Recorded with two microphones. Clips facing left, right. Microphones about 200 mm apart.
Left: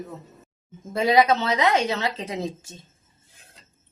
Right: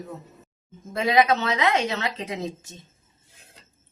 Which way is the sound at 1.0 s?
30° left (ahead or behind).